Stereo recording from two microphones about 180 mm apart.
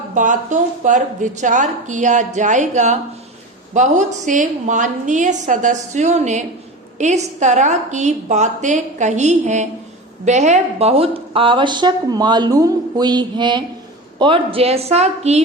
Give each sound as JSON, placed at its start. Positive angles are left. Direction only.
{"t": 0.1, "sound": "a woman's voice", "side_deg": -45}